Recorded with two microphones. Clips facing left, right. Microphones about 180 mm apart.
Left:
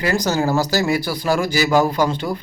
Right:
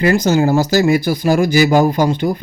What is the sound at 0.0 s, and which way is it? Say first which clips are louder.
Speech: right 6 dB; 20° right (ahead or behind).